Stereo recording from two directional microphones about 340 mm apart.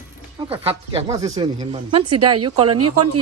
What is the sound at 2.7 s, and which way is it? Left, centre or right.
Speech, right.